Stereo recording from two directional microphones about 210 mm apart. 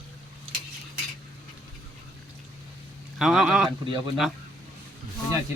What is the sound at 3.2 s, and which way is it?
Speech, 5° right (ahead or behind).